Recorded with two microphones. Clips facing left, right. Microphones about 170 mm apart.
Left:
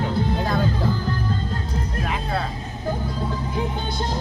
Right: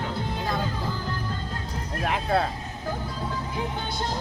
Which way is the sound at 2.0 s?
60° right (ahead or behind).